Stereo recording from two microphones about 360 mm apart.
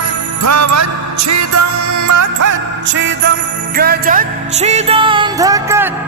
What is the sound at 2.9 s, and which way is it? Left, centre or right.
Music, right.